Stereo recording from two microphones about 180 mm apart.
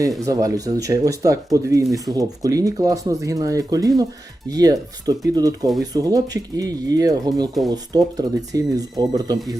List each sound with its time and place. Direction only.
0.3 s speech: 20° right (ahead or behind)